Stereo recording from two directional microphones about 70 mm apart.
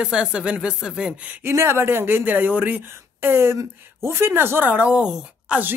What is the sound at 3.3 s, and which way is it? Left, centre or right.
Speech, right.